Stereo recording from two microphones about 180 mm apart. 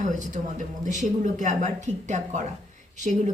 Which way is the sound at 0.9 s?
45° right (ahead or behind).